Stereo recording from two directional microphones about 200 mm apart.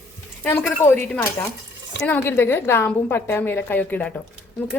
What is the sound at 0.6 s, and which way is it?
A woman's voice, 10° left (ahead or behind).